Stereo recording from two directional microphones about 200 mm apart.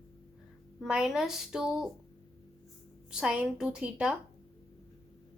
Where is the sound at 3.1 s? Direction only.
5° right (ahead or behind).